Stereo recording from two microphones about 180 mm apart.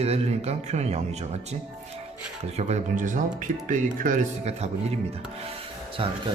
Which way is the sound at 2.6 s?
35° right (ahead or behind).